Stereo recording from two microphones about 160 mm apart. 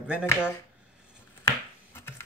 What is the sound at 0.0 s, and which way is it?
Speech, 5° right (ahead or behind).